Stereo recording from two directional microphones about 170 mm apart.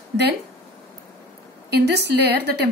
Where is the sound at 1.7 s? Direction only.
75° right (ahead or behind).